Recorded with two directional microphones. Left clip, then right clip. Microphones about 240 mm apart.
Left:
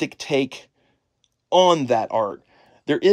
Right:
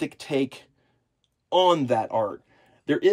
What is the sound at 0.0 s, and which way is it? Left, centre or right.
Speech, centre.